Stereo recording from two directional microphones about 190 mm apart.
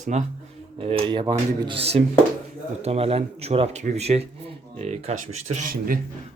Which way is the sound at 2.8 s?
30° right (ahead or behind).